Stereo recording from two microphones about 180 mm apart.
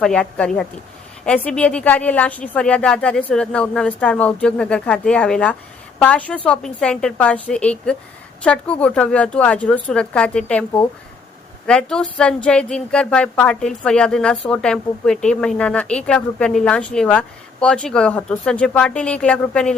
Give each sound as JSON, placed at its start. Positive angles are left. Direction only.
{"t": 0.0, "sound": "a woman's voice", "side_deg": 5}